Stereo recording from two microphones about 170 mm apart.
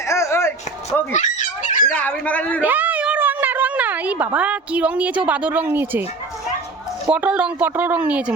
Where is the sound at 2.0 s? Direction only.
10° left (ahead or behind).